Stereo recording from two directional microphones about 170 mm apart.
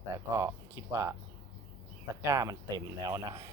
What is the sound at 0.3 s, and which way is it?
Speech, 15° right (ahead or behind).